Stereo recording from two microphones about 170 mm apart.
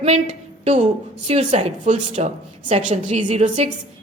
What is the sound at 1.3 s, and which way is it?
A woman's voice, 35° right (ahead or behind).